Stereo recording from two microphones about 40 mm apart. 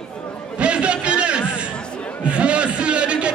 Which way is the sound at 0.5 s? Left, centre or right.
Right.